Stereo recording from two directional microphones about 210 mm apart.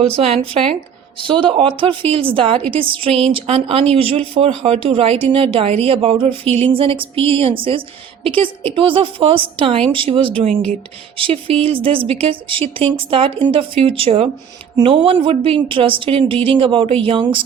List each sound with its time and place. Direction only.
0.2 s speech: 30° right (ahead or behind)
3.1 s speech: 5° left (ahead or behind)
3.3 s speech: 30° right (ahead or behind)